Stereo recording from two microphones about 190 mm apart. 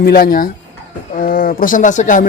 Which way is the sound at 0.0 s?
50° left (ahead or behind).